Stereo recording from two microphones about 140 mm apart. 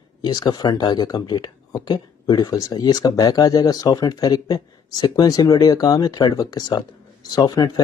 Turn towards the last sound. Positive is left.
turn(degrees=30)  # may be behind; listen again after turning